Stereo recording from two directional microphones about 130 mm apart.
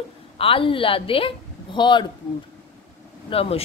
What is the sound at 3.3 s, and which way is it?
Speech, 50° left (ahead or behind).